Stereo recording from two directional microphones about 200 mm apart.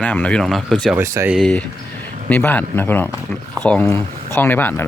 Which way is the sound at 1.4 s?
Centre (ahead or behind).